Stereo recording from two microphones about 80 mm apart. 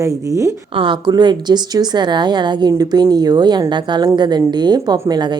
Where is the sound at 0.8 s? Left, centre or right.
Right.